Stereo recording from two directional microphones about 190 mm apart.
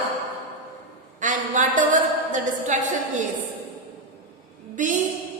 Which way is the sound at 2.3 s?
40° right (ahead or behind).